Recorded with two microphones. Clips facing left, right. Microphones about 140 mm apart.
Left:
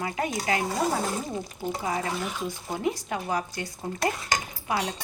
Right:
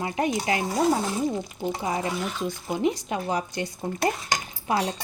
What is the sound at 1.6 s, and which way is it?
Speech, 20° right (ahead or behind).